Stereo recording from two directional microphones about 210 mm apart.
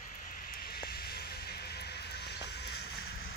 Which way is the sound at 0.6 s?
45° left (ahead or behind).